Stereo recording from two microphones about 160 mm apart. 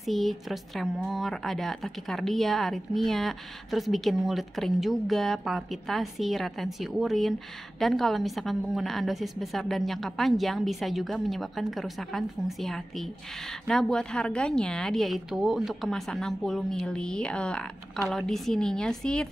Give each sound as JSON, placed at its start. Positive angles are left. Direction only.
{"t": 0.0, "sound": "speech", "side_deg": 0}